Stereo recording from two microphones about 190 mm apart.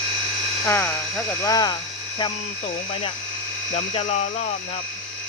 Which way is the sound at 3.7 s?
35° left (ahead or behind).